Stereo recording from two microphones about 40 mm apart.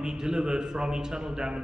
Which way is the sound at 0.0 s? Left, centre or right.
Centre.